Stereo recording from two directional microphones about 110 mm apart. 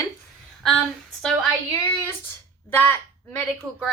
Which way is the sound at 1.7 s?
20° left (ahead or behind).